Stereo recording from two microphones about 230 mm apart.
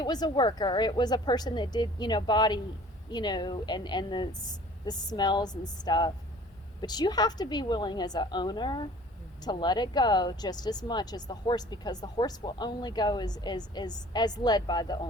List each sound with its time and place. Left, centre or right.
0.0 s a woman's voice: centre